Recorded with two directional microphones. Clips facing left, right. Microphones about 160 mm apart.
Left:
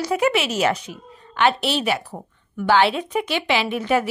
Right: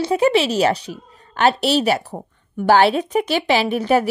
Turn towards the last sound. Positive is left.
turn(degrees=-35)  # may be behind; listen again after turning